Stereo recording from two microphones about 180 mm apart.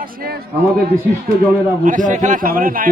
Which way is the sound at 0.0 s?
55° right (ahead or behind).